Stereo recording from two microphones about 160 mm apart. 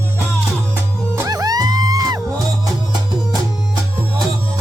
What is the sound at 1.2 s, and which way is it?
Music, 25° right (ahead or behind).